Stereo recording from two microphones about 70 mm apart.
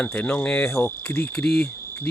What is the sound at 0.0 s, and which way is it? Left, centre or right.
Speech, left.